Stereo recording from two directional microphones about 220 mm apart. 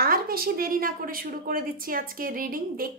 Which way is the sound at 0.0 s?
40° right (ahead or behind).